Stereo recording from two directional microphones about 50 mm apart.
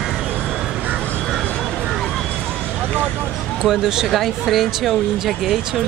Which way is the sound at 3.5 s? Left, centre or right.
Centre.